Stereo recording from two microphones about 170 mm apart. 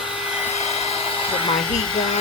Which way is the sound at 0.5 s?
35° left (ahead or behind).